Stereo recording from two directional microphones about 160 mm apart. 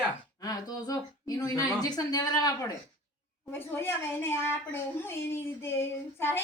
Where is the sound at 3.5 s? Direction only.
15° left (ahead or behind).